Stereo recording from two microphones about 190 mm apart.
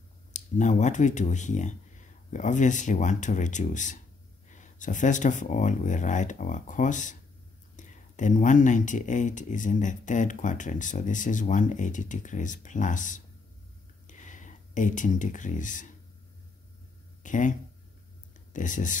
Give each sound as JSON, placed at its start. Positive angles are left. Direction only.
{"t": 0.3, "sound": "speech", "side_deg": 40}
{"t": 17.2, "sound": "speech", "side_deg": 40}